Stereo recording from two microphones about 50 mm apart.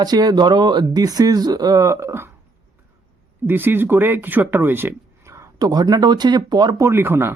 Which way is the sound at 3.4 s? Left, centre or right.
Right.